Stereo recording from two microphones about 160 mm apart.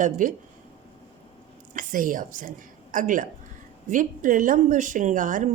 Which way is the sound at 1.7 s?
55° right (ahead or behind).